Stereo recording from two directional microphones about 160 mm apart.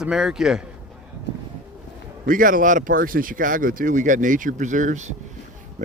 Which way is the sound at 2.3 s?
60° right (ahead or behind).